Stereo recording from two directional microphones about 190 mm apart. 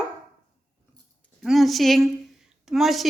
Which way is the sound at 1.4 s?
Centre (ahead or behind).